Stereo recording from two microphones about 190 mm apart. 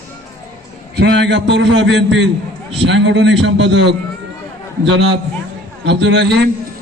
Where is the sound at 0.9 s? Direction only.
65° right (ahead or behind).